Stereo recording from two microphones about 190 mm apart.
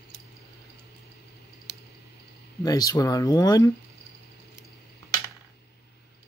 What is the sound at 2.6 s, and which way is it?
Speech, 20° left (ahead or behind).